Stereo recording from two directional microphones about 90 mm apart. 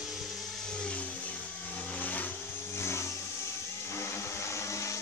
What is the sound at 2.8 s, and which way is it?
Vehicle, 30° left (ahead or behind).